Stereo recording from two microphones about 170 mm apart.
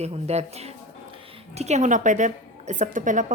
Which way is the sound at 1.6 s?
40° right (ahead or behind).